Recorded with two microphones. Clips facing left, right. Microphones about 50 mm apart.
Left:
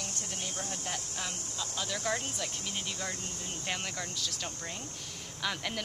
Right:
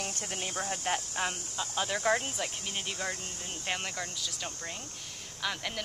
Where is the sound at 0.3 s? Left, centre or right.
Right.